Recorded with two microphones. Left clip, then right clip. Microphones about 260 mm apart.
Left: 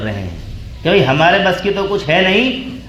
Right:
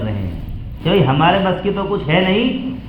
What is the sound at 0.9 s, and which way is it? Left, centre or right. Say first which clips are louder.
A man's voice: left 3 dB; left.